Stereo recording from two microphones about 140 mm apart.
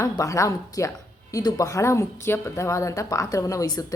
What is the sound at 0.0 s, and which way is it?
A woman's voice, 20° left (ahead or behind).